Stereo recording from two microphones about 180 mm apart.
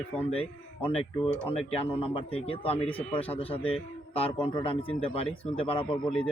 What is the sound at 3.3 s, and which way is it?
A man's voice, 30° left (ahead or behind).